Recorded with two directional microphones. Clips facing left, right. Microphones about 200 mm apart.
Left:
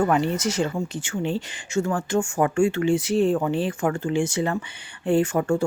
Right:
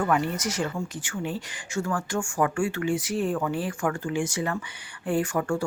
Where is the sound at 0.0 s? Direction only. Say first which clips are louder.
Left 4 dB; 25° left (ahead or behind).